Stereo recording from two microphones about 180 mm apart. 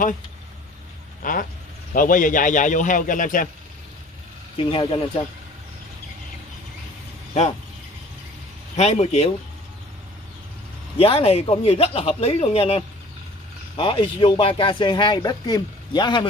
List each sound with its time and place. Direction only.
1.2 s vehicle: 50° left (ahead or behind)
2.0 s a man's voice: 50° left (ahead or behind)
4.6 s speech: 30° left (ahead or behind)
8.7 s speech: 35° left (ahead or behind)
11.0 s speech: 35° left (ahead or behind)